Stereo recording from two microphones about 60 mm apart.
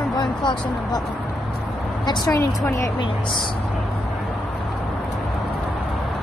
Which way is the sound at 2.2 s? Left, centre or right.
Left.